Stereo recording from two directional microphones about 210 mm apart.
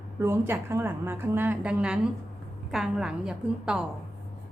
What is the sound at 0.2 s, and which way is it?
A woman's voice, 10° right (ahead or behind).